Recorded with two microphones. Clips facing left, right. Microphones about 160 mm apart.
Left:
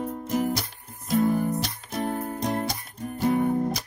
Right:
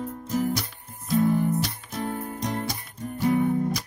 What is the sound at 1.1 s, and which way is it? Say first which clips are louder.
Music: right 1 dB; 45° left (ahead or behind).